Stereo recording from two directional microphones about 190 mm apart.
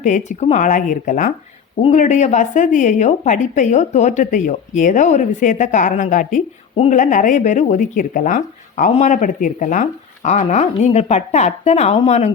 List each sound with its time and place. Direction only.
0.0 s a woman's voice: 40° left (ahead or behind)